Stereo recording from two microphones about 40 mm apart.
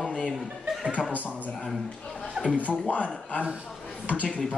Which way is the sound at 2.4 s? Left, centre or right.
Right.